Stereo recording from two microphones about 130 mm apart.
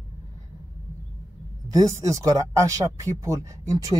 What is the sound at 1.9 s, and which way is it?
Speech, 25° right (ahead or behind).